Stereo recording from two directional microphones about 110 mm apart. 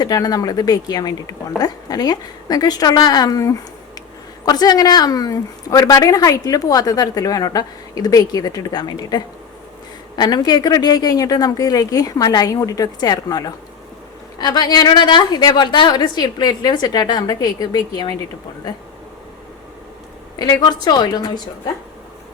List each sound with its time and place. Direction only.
0.0 s a woman's voice: 35° left (ahead or behind)
20.4 s a woman's voice: 40° left (ahead or behind)